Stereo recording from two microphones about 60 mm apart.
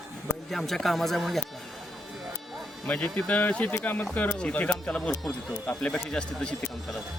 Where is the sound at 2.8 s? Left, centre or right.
Centre.